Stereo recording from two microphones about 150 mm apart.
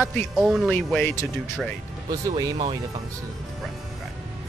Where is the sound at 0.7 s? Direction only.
10° left (ahead or behind).